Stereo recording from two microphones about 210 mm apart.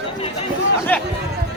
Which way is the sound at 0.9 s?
5° left (ahead or behind).